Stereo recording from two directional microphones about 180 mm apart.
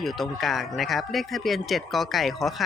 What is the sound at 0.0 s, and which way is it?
Speech, centre (ahead or behind).